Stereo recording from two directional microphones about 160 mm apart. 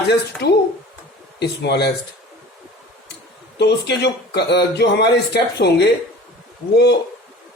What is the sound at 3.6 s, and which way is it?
A man's voice, 90° left.